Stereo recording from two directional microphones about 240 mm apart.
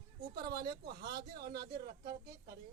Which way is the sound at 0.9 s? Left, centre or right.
Right.